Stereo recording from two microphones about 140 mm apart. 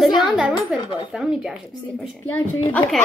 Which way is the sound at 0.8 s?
35° left (ahead or behind).